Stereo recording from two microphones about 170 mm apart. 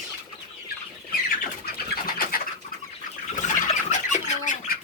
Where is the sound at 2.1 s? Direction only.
60° left (ahead or behind).